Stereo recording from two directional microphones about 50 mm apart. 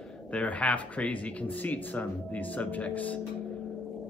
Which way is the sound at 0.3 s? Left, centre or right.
Left.